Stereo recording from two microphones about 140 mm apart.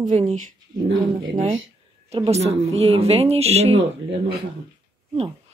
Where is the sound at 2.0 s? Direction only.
45° right (ahead or behind).